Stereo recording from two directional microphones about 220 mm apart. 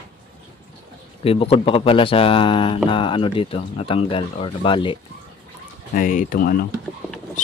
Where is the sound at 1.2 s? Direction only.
25° left (ahead or behind).